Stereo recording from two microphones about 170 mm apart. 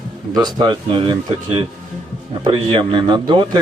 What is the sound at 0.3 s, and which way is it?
Speech, 25° right (ahead or behind).